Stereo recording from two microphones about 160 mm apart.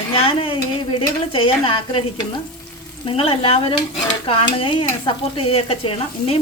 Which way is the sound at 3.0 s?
35° left (ahead or behind).